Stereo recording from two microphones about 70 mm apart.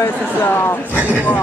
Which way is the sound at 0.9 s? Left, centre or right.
Right.